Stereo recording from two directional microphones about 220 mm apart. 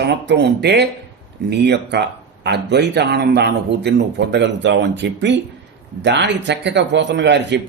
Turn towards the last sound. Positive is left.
turn(degrees=-50)  # may be behind; listen again after turning